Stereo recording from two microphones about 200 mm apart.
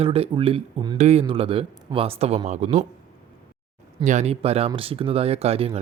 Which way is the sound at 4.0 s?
35° right (ahead or behind).